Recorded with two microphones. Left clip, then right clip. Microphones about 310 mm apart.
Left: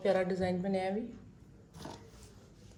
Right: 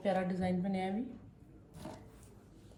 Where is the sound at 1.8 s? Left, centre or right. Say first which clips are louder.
Left 2 dB; centre.